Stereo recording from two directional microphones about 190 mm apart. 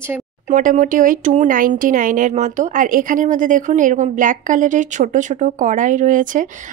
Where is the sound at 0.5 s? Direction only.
45° right (ahead or behind).